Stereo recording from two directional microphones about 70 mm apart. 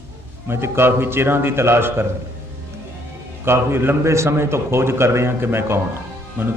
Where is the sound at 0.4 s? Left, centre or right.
Right.